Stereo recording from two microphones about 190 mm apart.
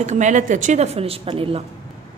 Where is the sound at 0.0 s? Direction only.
40° right (ahead or behind).